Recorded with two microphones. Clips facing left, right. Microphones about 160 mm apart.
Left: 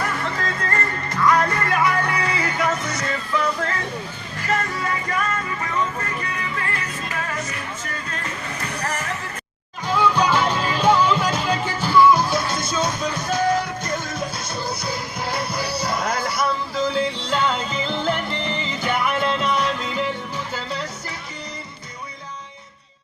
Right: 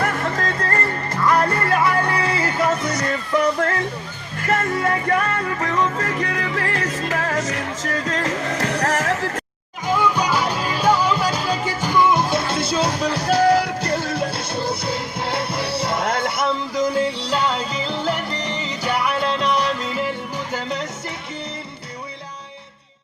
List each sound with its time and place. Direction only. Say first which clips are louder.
0.0 s music: right 3 dB; 50° right (ahead or behind)
4.4 s music: right 4 dB; 50° right (ahead or behind); by 9.4 s 90° right
9.9 s music: left 1 dB; 10° right (ahead or behind)
11.8 s music: left 3 dB; 15° right (ahead or behind); by 14.0 s 35° right (ahead or behind)
14.0 s music: right 5 dB; 65° right (ahead or behind)
14.3 s music: right 4 dB; 30° right (ahead or behind)
17.1 s music: right 2 dB; 40° right (ahead or behind)
17.3 s music: left 2 dB; centre (ahead or behind)
18.3 s music: even; 40° right (ahead or behind)
18.8 s music: right 1 dB; centre (ahead or behind)
20.5 s music: right 5 dB; 20° right (ahead or behind)